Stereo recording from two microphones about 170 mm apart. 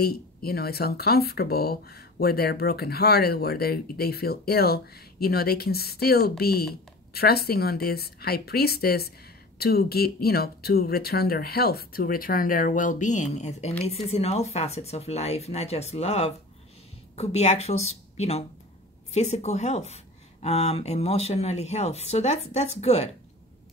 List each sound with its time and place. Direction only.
0.0 s speech: 65° left (ahead or behind); by 23.1 s 40° left (ahead or behind)